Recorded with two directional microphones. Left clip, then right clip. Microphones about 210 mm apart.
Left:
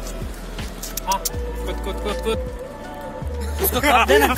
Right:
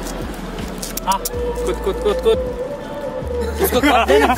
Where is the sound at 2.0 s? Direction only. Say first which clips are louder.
Right 8 dB; 30° right (ahead or behind).